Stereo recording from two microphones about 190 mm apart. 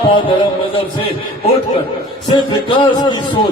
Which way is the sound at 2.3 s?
25° left (ahead or behind).